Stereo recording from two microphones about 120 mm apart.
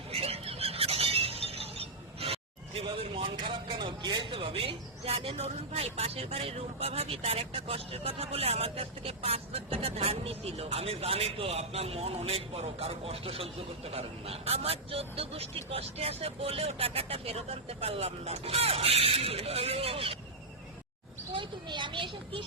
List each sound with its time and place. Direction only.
0.1 s speech: 55° right (ahead or behind)
21.3 s speech: 40° right (ahead or behind)